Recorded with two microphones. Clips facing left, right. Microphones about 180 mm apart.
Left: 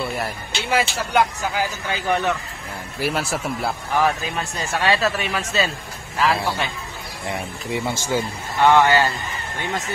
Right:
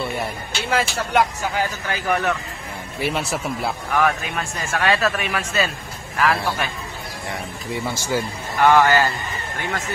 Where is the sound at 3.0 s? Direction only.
5° left (ahead or behind).